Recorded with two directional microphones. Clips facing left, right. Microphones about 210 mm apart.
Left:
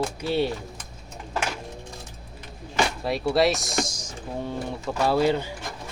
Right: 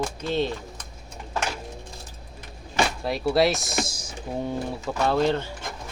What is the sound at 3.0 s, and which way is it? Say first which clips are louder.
Speech: even; centre (ahead or behind).